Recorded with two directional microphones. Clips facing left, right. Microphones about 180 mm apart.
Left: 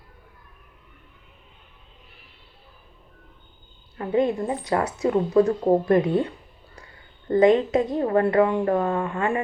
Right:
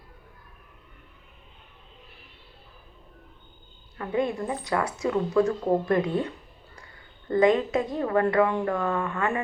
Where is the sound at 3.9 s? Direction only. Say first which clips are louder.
Left 5 dB; 25° left (ahead or behind).